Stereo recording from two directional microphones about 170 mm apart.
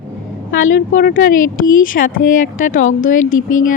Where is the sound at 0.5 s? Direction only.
50° left (ahead or behind).